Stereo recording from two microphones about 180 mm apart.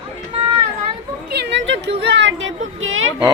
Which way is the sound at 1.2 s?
65° right (ahead or behind).